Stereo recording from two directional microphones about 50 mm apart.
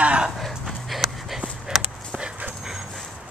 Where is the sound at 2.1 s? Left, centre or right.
Right.